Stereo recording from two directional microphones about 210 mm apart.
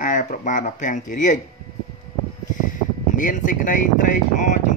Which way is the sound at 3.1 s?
40° left (ahead or behind).